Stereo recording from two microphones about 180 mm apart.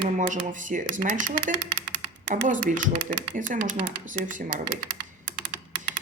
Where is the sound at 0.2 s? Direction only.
45° right (ahead or behind).